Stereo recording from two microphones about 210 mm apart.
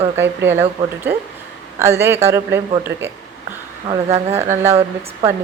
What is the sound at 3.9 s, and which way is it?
Speech, 10° right (ahead or behind).